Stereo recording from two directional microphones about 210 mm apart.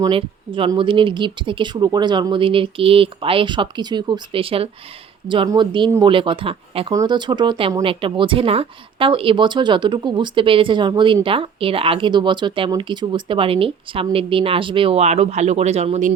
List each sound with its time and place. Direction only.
0.0 s speech: 25° right (ahead or behind)